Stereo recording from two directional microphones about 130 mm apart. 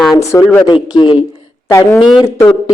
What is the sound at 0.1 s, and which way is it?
Speech, 25° left (ahead or behind).